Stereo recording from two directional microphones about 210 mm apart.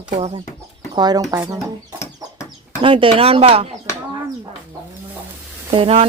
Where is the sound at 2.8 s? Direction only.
25° right (ahead or behind).